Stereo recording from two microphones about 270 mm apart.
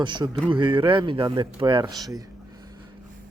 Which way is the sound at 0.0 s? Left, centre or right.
Centre.